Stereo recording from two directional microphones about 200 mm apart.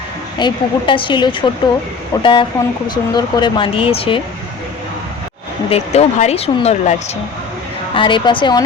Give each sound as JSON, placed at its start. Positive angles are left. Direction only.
{"t": 0.3, "sound": "speech", "side_deg": 25}
{"t": 5.7, "sound": "speech", "side_deg": 35}
{"t": 7.9, "sound": "speech", "side_deg": 25}